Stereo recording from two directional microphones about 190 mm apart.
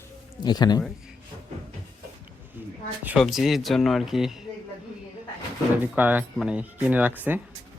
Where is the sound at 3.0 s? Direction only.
5° right (ahead or behind).